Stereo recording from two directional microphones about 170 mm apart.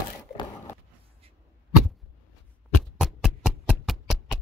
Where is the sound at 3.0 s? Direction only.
Centre (ahead or behind).